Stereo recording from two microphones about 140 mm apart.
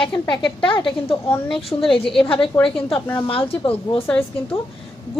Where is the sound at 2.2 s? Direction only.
40° left (ahead or behind).